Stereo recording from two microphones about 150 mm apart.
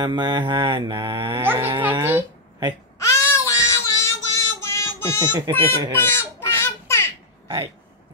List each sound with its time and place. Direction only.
0.0 s mantra: 30° right (ahead or behind)
1.4 s speech: 15° right (ahead or behind)
3.0 s child singing: 20° left (ahead or behind)
5.5 s mantra: 20° right (ahead or behind)
5.9 s a sound: 15° left (ahead or behind)